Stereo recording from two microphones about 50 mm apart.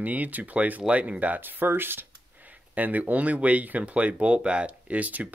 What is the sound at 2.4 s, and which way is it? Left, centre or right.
Speech, right.